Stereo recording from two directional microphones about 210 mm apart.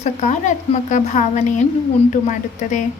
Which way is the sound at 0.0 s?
35° left (ahead or behind).